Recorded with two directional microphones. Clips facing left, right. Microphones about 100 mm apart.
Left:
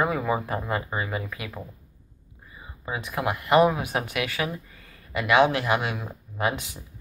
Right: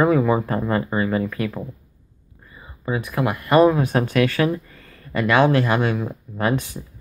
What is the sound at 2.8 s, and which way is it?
Speech, 20° left (ahead or behind).